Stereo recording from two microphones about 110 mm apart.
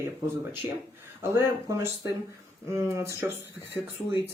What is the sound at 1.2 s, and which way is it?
Speech, 25° right (ahead or behind).